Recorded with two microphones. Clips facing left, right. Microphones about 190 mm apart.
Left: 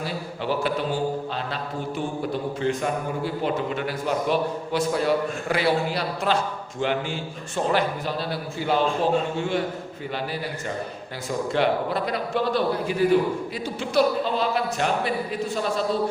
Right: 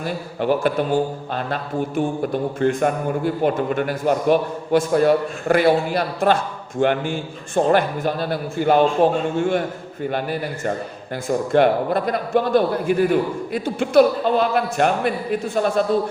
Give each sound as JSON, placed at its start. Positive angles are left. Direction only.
{"t": 0.0, "sound": "a man's voice", "side_deg": -50}
{"t": 2.0, "sound": "a man's voice", "side_deg": -50}
{"t": 11.3, "sound": "a man's voice", "side_deg": -50}